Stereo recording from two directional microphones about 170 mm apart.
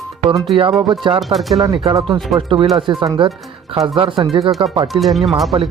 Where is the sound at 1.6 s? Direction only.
25° right (ahead or behind).